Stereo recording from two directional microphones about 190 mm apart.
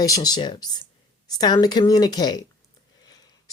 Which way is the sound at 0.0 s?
20° left (ahead or behind).